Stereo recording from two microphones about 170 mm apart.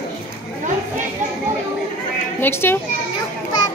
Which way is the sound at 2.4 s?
15° left (ahead or behind).